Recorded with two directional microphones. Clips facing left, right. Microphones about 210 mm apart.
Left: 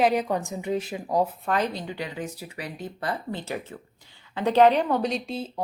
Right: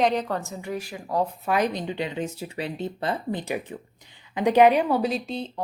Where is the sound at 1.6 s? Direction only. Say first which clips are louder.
Right 3 dB; 20° right (ahead or behind).